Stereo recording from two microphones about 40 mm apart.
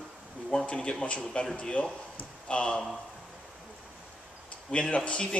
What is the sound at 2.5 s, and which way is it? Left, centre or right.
Speech, left.